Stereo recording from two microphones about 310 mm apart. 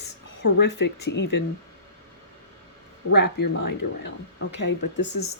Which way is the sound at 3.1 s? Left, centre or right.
Left.